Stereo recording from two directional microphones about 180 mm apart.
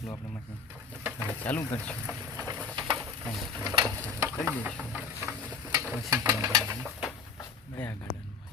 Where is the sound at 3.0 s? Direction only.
Centre (ahead or behind).